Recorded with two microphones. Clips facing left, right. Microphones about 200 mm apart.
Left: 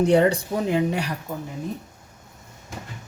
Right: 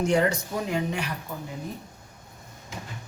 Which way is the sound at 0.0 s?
35° left (ahead or behind).